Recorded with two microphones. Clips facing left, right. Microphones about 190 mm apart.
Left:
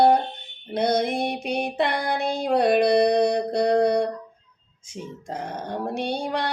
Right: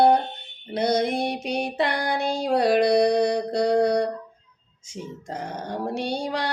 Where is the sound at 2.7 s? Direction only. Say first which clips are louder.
Even; 5° right (ahead or behind).